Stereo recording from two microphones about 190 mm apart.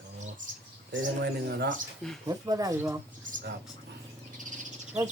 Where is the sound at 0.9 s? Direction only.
60° right (ahead or behind).